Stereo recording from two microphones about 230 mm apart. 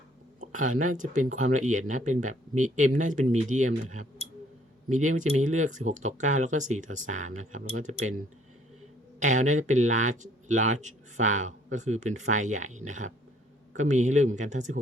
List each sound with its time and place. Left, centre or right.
0.3 s a sound: right
0.9 s speech: right
4.9 s speech: right
9.2 s speech: right